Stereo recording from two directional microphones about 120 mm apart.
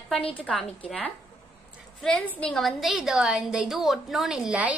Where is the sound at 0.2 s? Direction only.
50° left (ahead or behind).